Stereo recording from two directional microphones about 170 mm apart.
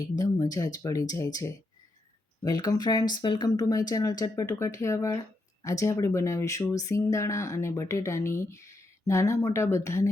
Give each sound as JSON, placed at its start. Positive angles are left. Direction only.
{"t": 0.2, "sound": "speech", "side_deg": 20}